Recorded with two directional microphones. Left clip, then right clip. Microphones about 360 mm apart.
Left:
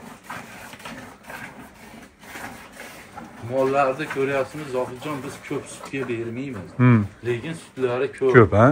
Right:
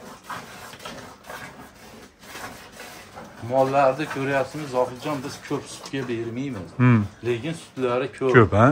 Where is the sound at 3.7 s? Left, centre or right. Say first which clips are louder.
Right 1 dB; right.